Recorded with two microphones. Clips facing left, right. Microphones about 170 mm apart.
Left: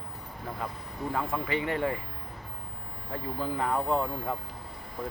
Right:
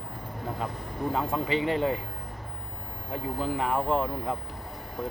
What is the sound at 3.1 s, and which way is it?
Speech, 15° right (ahead or behind).